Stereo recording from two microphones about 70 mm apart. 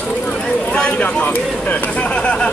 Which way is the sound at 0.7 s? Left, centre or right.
Centre.